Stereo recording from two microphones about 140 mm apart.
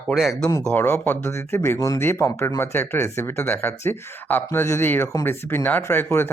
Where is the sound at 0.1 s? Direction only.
Centre (ahead or behind).